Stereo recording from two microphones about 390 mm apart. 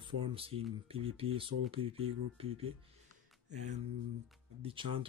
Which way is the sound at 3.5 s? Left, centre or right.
Right.